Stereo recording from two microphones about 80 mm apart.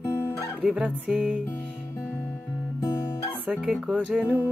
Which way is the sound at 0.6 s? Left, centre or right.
Centre.